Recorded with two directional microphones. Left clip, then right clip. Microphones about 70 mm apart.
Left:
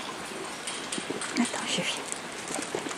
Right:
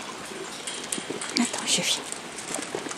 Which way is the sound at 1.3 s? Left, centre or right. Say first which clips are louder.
Right 4 dB; centre.